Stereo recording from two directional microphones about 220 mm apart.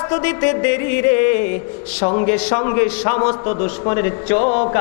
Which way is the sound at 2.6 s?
15° left (ahead or behind).